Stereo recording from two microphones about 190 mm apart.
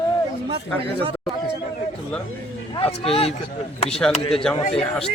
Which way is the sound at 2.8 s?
30° left (ahead or behind).